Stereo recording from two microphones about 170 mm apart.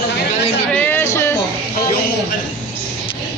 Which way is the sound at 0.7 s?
10° left (ahead or behind).